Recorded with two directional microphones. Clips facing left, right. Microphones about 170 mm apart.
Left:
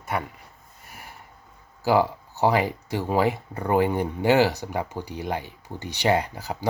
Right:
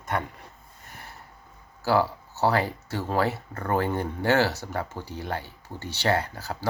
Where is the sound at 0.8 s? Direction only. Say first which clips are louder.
Left 1 dB; 10° left (ahead or behind).